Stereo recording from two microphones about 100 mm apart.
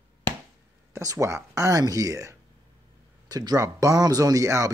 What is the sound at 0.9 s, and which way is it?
Speech, 30° right (ahead or behind).